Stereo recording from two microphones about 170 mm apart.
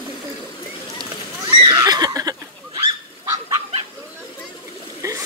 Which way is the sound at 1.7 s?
20° right (ahead or behind).